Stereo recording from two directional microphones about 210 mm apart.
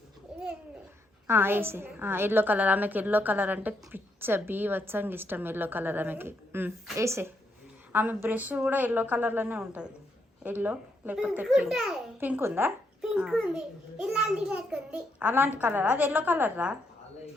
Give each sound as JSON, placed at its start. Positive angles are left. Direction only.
{"t": 0.3, "sound": "babbling", "side_deg": -5}
{"t": 1.3, "sound": "a woman's voice", "side_deg": -10}